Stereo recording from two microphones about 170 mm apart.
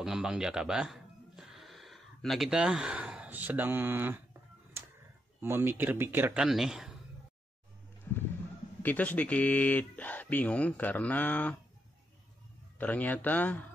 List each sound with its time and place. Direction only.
0.0 s speech: 5° right (ahead or behind)
5.4 s a man's voice: 15° right (ahead or behind)
8.1 s roaring cats: 15° left (ahead or behind)
8.8 s speech: 10° left (ahead or behind)
12.7 s speech: 10° left (ahead or behind)